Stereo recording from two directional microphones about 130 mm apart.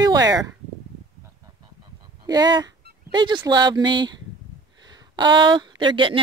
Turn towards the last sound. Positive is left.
turn(degrees=-40)  # may be behind; listen again after turning